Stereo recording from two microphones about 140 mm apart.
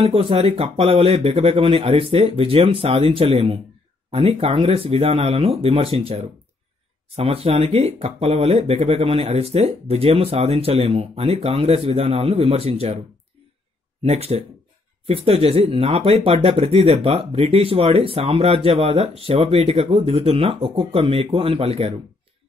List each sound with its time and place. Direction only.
0.0 s speech: 40° right (ahead or behind)
14.0 s speech: 50° right (ahead or behind)